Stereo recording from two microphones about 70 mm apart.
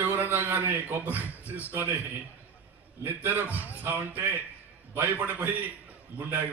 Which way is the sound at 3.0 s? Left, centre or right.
Right.